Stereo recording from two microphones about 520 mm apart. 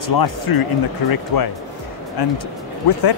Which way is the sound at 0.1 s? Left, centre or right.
Left.